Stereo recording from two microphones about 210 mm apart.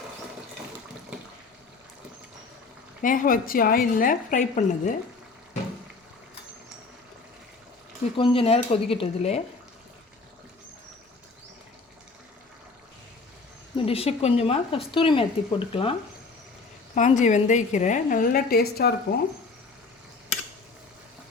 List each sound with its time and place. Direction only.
3.0 s a woman's voice: 40° left (ahead or behind)
8.1 s a woman's voice: 25° left (ahead or behind)
13.7 s a woman's voice: 25° left (ahead or behind)
16.9 s a woman's voice: 35° left (ahead or behind)